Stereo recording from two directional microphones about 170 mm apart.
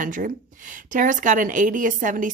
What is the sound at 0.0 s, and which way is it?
A woman's voice, 50° right (ahead or behind).